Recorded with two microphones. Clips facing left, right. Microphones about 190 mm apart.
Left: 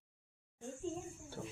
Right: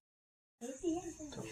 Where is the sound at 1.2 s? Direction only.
45° right (ahead or behind).